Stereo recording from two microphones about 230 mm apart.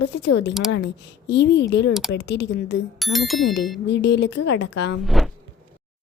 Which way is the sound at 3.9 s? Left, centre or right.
Left.